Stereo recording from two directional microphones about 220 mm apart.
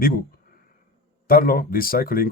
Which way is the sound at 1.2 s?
40° left (ahead or behind).